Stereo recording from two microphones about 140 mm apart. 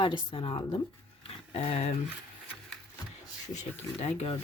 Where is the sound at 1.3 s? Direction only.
45° left (ahead or behind).